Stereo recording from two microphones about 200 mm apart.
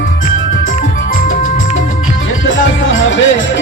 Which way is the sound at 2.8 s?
70° left (ahead or behind).